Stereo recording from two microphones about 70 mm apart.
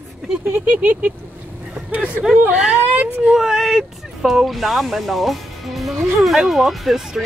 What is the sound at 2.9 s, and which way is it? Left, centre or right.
Speech, right.